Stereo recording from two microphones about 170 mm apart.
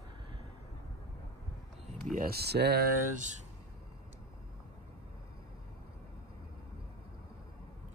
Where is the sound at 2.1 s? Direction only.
60° right (ahead or behind).